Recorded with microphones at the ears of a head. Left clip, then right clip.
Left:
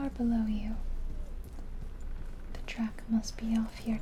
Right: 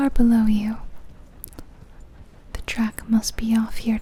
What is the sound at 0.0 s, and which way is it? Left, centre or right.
Speech, right.